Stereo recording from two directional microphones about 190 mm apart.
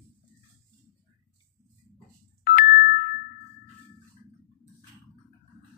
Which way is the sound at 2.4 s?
50° left (ahead or behind).